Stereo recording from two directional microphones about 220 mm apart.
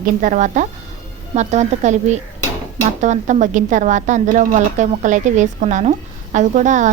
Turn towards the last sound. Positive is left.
turn(degrees=-35)  # may be behind; listen again after turning